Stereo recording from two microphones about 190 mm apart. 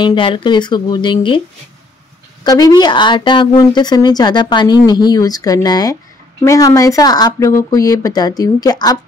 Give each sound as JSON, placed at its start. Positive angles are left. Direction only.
{"t": 0.0, "sound": "speech", "side_deg": 25}
{"t": 2.4, "sound": "speech", "side_deg": 20}